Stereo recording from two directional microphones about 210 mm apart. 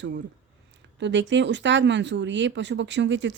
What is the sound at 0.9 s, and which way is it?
Speech, 60° right (ahead or behind).